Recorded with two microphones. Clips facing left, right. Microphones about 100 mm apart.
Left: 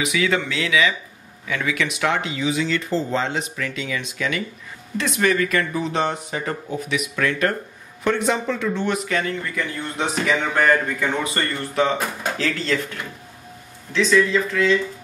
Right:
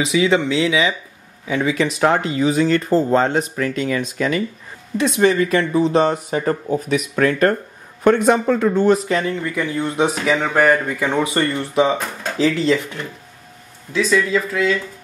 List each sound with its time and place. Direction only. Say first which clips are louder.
0.0 s speech: right 5 dB; 25° right (ahead or behind); by 4.4 s 40° right (ahead or behind)
4.9 s speech: right 5 dB; 25° right (ahead or behind)
9.6 s speech: right 9 dB; 20° right (ahead or behind)
10.2 s speech: right 2 dB; 10° right (ahead or behind)
11.1 s speech: right 8 dB; 20° right (ahead or behind)
12.0 s speech: left 1 dB; 5° left (ahead or behind)
12.4 s speech: right 8 dB; 15° right (ahead or behind)
13.9 s speech: even; 5° right (ahead or behind)